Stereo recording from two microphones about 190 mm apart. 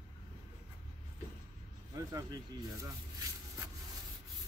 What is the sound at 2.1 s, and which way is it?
Speech, 15° right (ahead or behind).